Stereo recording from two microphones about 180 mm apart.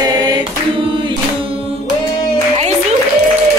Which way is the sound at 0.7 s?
30° right (ahead or behind).